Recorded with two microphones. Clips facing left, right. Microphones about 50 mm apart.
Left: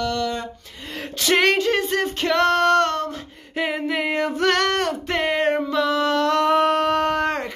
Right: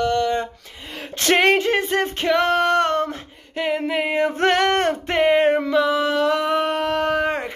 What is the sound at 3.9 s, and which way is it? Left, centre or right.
Music, centre.